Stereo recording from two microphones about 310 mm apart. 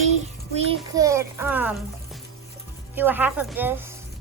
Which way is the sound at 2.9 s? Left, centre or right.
Centre.